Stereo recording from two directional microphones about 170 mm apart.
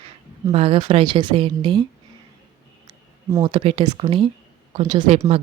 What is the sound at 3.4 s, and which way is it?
A woman's voice, 30° right (ahead or behind).